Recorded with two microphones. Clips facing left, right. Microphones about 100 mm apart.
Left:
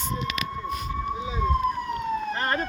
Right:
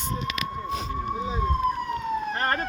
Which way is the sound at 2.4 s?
45° right (ahead or behind).